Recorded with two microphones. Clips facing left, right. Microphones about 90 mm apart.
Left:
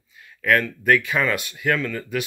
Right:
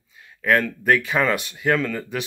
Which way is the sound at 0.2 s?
25° right (ahead or behind).